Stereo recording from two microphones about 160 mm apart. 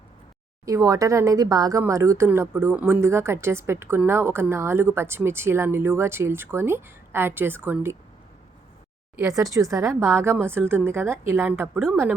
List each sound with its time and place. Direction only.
0.6 s speech: 20° right (ahead or behind)
9.1 s speech: 20° right (ahead or behind)